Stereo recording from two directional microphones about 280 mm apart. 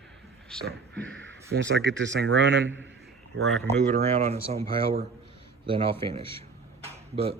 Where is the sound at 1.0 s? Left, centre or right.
Right.